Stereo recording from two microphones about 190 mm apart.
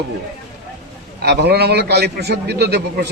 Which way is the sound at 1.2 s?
60° right (ahead or behind).